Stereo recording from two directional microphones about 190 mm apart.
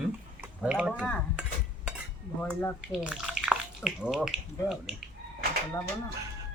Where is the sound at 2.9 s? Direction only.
Centre (ahead or behind).